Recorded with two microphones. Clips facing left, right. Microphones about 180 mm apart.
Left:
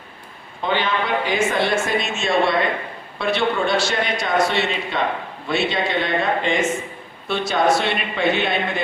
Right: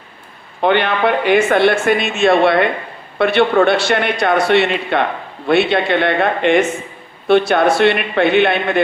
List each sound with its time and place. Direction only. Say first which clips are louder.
0.6 s speech: right 8 dB; 65° right (ahead or behind)